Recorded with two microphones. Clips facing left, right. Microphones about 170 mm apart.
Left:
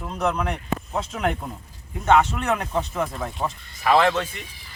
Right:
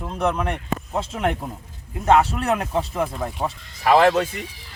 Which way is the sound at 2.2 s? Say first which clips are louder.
Right 1 dB; 35° right (ahead or behind).